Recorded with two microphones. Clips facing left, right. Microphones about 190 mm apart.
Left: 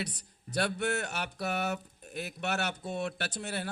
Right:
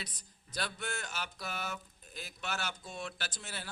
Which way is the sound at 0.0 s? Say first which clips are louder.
Left 10 dB; 65° left (ahead or behind).